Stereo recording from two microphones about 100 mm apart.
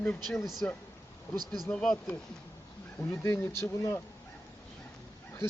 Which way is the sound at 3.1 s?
25° left (ahead or behind).